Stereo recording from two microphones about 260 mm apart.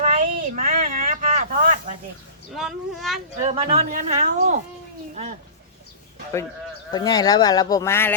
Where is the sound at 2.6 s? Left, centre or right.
Centre.